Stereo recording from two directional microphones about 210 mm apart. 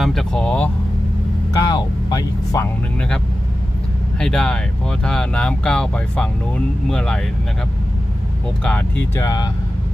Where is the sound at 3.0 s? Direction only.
5° left (ahead or behind).